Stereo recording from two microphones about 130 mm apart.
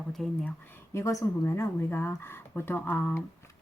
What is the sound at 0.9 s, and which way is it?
Speech, 25° left (ahead or behind).